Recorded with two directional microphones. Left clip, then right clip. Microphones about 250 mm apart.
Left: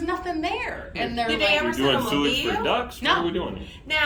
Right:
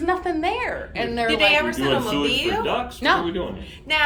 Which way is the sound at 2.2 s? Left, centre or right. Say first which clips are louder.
Right 2 dB; centre.